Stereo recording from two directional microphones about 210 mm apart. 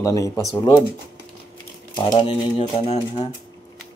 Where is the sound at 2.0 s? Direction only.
25° left (ahead or behind).